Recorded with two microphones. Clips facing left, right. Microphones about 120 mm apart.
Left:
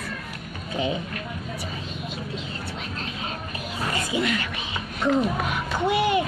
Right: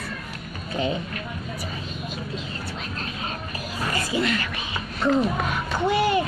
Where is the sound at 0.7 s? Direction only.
15° left (ahead or behind).